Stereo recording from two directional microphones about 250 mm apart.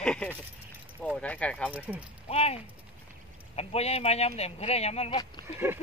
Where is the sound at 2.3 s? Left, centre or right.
Left.